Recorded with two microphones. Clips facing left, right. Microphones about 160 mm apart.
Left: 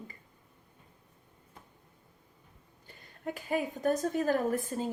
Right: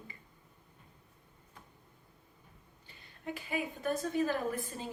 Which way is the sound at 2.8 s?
45° left (ahead or behind).